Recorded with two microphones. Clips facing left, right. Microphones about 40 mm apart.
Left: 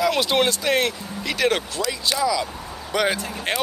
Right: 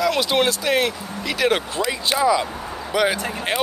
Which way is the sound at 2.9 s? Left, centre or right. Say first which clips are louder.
Right 2 dB; centre.